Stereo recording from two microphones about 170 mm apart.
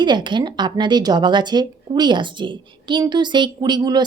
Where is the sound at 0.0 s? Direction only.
25° right (ahead or behind).